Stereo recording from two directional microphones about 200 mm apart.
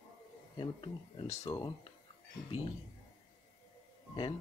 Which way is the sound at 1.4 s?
15° left (ahead or behind).